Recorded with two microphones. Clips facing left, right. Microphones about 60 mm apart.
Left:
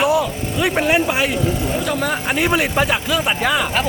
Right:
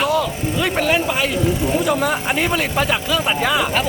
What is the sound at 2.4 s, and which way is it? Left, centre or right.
Speech, centre.